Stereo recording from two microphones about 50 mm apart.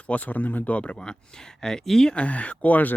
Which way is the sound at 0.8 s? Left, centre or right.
Centre.